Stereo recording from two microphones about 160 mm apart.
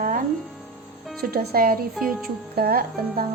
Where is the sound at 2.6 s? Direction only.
70° right (ahead or behind).